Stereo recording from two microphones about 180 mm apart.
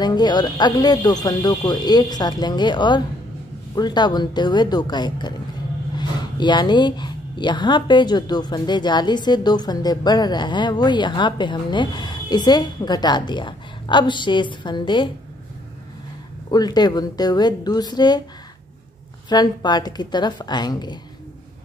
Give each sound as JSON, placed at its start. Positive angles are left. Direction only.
{"t": 0.0, "sound": "speech", "side_deg": 25}
{"t": 16.4, "sound": "speech", "side_deg": 20}
{"t": 19.2, "sound": "speech", "side_deg": 25}